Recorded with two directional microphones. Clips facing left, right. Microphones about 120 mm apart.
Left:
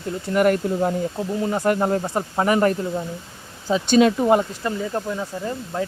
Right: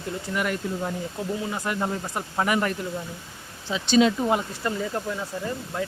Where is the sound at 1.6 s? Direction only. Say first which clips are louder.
Left 9 dB; 45° left (ahead or behind).